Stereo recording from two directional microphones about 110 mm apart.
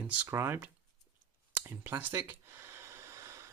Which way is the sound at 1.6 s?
20° right (ahead or behind).